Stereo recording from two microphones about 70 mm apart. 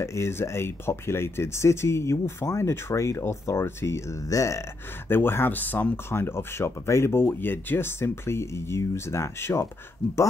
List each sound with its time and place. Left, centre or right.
0.0 s speech: left
5.1 s speech: left